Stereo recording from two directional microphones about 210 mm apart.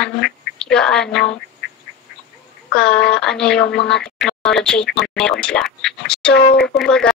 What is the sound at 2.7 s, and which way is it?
Speech, 5° left (ahead or behind).